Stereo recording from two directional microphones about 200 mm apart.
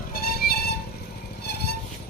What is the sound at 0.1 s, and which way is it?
Music, 50° left (ahead or behind).